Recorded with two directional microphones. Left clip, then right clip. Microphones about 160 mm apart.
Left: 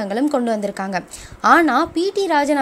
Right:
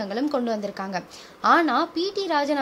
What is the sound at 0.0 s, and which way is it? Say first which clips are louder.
A woman's voice: left 6 dB; 15° left (ahead or behind).